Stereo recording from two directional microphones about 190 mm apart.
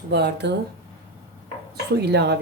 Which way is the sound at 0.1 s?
60° right (ahead or behind).